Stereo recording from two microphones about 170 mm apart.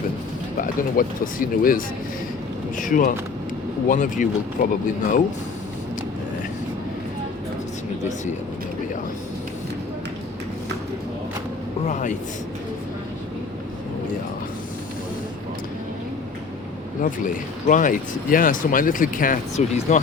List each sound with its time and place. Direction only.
0.5 s speech: 55° left (ahead or behind)
11.9 s speech: 45° left (ahead or behind)
17.0 s speech: 50° left (ahead or behind)